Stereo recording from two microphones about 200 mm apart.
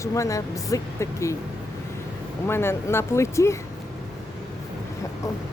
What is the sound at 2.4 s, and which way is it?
Speech, 10° left (ahead or behind).